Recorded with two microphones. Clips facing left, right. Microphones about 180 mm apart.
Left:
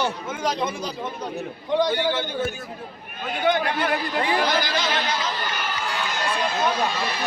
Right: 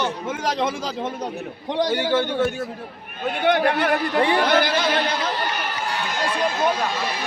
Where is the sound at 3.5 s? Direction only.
65° right (ahead or behind).